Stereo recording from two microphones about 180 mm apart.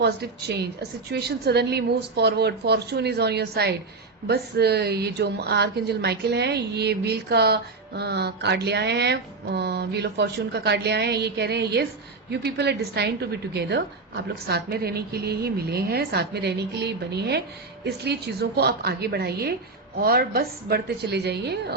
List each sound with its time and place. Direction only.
0.0 s a woman's voice: 65° right (ahead or behind)